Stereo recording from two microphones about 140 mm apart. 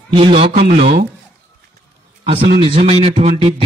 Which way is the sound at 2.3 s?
40° right (ahead or behind).